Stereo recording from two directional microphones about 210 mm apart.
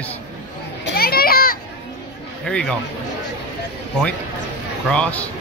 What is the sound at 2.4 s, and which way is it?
Speech, 5° left (ahead or behind).